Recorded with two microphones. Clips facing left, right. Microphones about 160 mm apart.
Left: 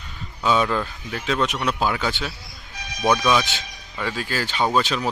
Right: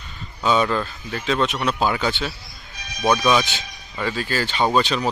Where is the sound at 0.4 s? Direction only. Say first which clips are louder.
Right 1 dB; 5° left (ahead or behind).